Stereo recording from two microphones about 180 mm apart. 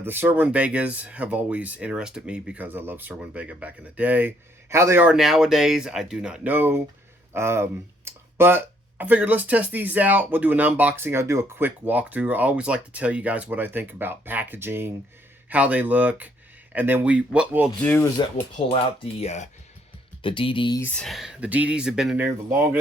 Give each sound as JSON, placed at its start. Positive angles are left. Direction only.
{"t": 0.0, "sound": "speech", "side_deg": -10}
{"t": 5.1, "sound": "speech", "side_deg": 0}
{"t": 17.7, "sound": "speech", "side_deg": 10}
{"t": 18.2, "sound": "speech", "side_deg": 25}
{"t": 19.2, "sound": "speech", "side_deg": 40}
{"t": 20.8, "sound": "speech", "side_deg": 5}